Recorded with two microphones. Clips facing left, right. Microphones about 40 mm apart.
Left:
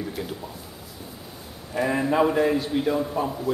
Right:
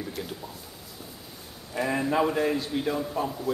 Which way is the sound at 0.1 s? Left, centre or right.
Centre.